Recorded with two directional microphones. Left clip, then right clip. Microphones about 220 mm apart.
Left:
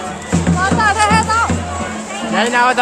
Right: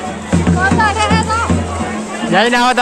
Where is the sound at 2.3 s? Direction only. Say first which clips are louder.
Right 2 dB; 40° right (ahead or behind).